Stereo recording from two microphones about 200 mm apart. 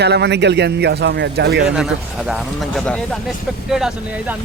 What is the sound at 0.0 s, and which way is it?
A man's voice, 55° right (ahead or behind).